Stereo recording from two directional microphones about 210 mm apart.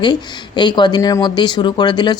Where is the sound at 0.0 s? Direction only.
20° left (ahead or behind).